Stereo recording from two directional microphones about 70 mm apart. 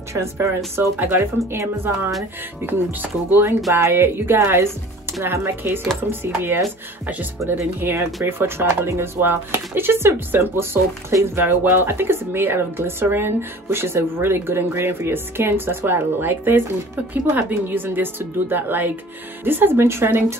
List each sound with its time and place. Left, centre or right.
0.1 s speech: right
0.7 s speech: right
1.5 s speech: right
2.6 s a woman's voice: right